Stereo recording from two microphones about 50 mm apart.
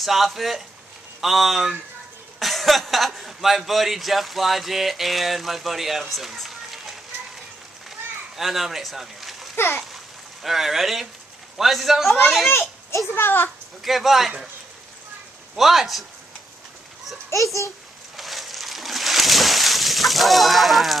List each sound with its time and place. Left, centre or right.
0.0 s speech: centre
8.4 s speech: centre
9.9 s a sound: centre
11.5 s speech: centre
13.1 s a child's voice: left
13.8 s speech: centre
15.5 s speech: centre
17.3 s a child's voice: left
18.1 s a sound: centre